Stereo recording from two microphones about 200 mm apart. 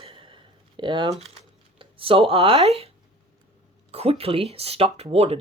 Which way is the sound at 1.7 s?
25° right (ahead or behind).